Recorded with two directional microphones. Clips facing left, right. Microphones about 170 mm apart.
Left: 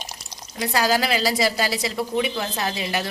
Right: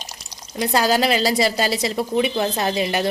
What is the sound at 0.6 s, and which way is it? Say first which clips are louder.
A woman's voice: right 3 dB; 25° right (ahead or behind).